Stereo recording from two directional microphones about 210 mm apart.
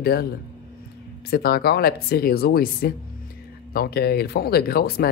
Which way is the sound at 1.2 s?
45° left (ahead or behind).